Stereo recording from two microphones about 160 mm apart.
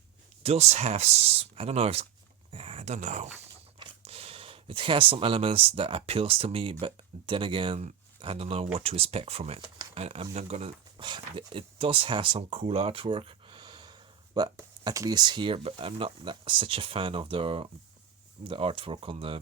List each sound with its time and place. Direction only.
0.4 s speech: 40° right (ahead or behind)
2.5 s a sound: 35° right (ahead or behind)
3.8 s speech: 35° right (ahead or behind)